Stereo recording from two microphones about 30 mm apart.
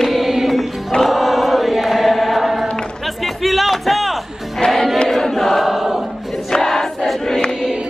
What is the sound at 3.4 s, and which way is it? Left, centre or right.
Music, centre.